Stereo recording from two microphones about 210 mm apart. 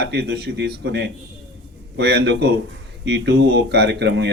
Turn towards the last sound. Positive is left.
turn(degrees=-55)  # may be behind; listen again after turning